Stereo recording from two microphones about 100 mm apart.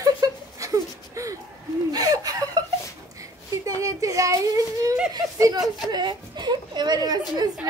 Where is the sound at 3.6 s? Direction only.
35° right (ahead or behind).